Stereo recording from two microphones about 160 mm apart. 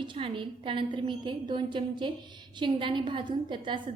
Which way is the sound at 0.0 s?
30° right (ahead or behind).